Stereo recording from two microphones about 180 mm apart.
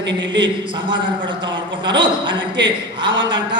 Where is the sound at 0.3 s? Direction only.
25° right (ahead or behind).